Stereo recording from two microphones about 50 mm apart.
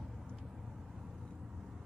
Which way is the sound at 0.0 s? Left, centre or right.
Centre.